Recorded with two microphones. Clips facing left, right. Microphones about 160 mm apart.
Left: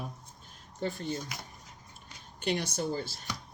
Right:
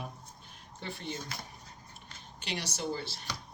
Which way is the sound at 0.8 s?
45° left (ahead or behind).